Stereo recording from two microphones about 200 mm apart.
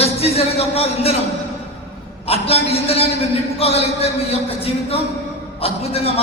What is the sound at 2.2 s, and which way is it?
A man's voice, 30° left (ahead or behind).